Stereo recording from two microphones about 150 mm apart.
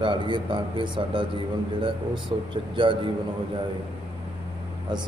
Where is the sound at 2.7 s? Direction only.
35° right (ahead or behind).